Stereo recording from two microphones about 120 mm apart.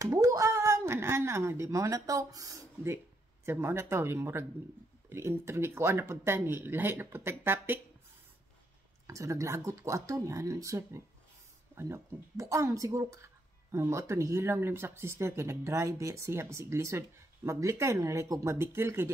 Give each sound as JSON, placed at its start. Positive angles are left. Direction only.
{"t": 0.0, "sound": "a woman's voice", "side_deg": -25}
{"t": 9.0, "sound": "speech", "side_deg": -25}